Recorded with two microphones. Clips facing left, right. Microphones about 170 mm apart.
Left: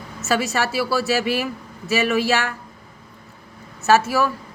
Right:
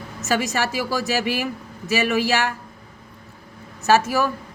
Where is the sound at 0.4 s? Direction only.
15° right (ahead or behind).